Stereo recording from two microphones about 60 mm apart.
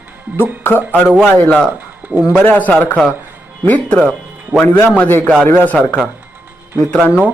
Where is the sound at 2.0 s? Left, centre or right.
Right.